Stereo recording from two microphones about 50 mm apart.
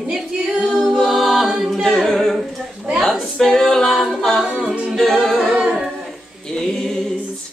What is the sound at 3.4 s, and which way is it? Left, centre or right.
Music, centre.